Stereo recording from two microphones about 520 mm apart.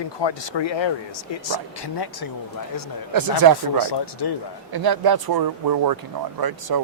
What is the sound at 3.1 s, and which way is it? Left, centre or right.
Speech, right.